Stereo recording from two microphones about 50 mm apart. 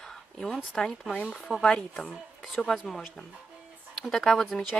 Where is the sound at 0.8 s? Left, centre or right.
Centre.